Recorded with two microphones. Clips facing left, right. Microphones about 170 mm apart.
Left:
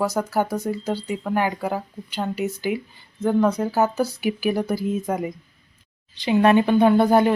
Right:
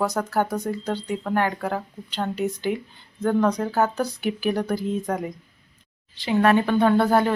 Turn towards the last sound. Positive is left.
turn(degrees=15)  # may be behind; listen again after turning